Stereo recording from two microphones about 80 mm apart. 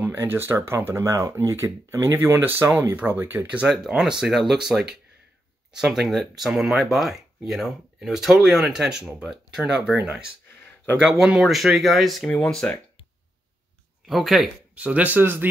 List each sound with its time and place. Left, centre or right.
0.0 s speech: right
3.6 s speech: centre
14.0 s speech: centre
14.8 s speech: centre